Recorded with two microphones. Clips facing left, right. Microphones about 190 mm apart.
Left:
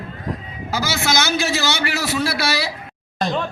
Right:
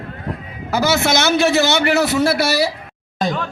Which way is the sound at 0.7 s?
60° right (ahead or behind).